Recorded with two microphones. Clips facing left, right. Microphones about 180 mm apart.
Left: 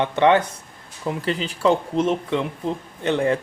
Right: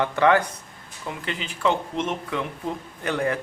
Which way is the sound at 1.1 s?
35° left (ahead or behind).